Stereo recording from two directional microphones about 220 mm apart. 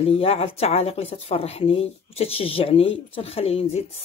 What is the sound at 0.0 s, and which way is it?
Speech, 25° left (ahead or behind).